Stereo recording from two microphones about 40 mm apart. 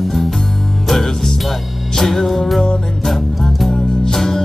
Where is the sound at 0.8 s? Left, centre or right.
Centre.